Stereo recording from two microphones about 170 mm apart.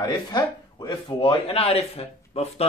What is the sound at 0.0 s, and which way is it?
Speech, 25° left (ahead or behind).